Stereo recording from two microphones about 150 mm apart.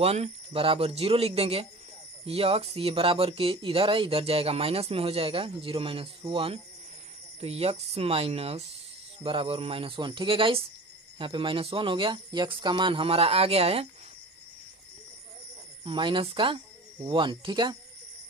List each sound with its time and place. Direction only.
0.0 s speech: 45° right (ahead or behind)
15.8 s speech: 35° right (ahead or behind)